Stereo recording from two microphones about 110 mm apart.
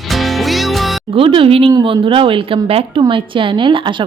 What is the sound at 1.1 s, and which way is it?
A woman's voice, 55° right (ahead or behind).